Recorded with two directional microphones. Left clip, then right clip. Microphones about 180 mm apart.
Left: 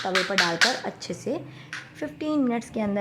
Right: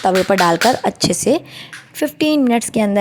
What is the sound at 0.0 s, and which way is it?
A woman's voice, 45° right (ahead or behind).